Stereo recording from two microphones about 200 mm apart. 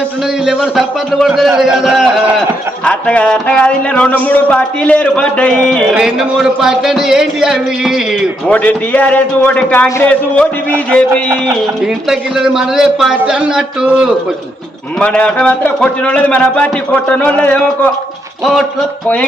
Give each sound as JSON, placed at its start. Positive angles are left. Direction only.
{"t": 0.4, "sound": "speech", "side_deg": -5}